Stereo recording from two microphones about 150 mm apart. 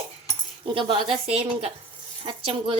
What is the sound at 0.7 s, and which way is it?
Dishes, 35° right (ahead or behind).